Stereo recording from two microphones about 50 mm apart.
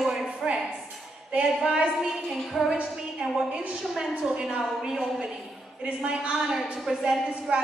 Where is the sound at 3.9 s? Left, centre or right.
Centre.